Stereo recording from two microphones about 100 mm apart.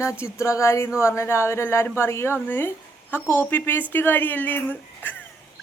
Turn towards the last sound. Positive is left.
turn(degrees=20)  # may be behind; listen again after turning